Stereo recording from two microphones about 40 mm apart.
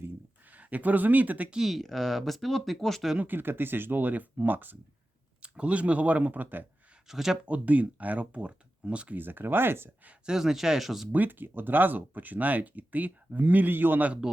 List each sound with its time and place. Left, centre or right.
0.4 s speech: right
1.6 s speech: centre
3.2 s speech: right
5.4 s speech: right
7.1 s speech: centre
7.4 s speech: right
9.1 s speech: right
10.2 s speech: centre
11.1 s speech: right